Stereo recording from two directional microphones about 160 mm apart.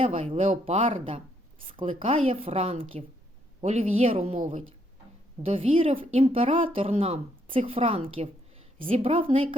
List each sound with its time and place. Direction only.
0.1 s a woman's voice: 40° right (ahead or behind)
4.2 s a woman's voice: 50° right (ahead or behind)
5.5 s speech: 35° right (ahead or behind)